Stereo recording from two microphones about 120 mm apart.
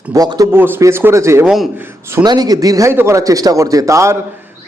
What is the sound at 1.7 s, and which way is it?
Speech, 15° right (ahead or behind).